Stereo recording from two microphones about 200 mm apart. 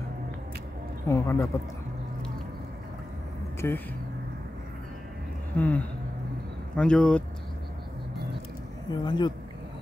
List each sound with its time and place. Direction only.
1.0 s speech: 15° left (ahead or behind)
3.6 s speech: 10° left (ahead or behind)
5.6 s speech: 5° left (ahead or behind)
8.9 s speech: 20° left (ahead or behind)